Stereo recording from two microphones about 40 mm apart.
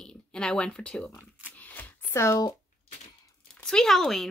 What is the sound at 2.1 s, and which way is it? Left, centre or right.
Speech, left.